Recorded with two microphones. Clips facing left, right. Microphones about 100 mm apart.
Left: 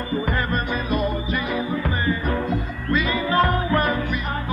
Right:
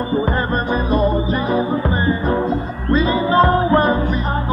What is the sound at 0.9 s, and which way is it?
Music, 30° right (ahead or behind).